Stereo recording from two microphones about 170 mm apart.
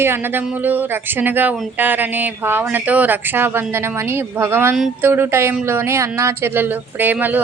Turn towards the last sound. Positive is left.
turn(degrees=-10)  # may be behind; listen again after turning